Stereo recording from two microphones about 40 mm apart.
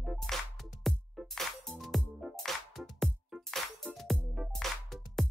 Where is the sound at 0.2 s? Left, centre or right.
Centre.